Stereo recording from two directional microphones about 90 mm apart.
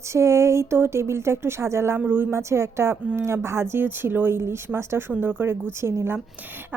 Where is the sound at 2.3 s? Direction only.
30° right (ahead or behind).